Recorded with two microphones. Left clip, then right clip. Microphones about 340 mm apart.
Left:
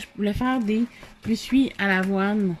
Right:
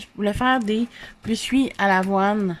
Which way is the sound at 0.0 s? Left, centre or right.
Centre.